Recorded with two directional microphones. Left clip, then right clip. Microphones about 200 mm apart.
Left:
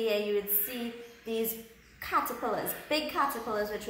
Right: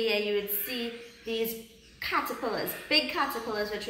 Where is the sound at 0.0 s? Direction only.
15° left (ahead or behind).